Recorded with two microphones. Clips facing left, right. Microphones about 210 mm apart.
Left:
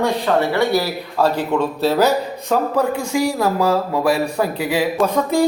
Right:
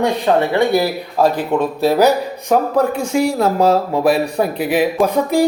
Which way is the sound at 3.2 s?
20° right (ahead or behind).